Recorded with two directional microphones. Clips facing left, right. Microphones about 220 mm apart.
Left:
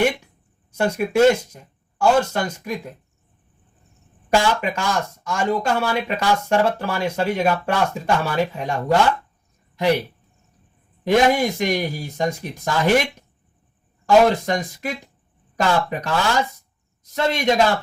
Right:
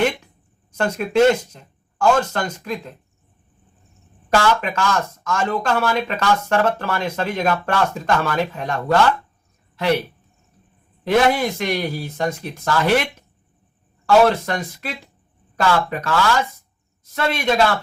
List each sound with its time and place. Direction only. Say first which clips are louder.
0.7 s speech: even; 10° left (ahead or behind)
4.3 s speech: right 1 dB; 15° left (ahead or behind)
11.0 s speech: even; 15° left (ahead or behind)
14.3 s a man's voice: even; 15° left (ahead or behind)